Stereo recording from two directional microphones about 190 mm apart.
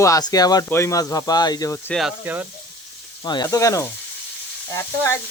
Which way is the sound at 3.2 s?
20° left (ahead or behind).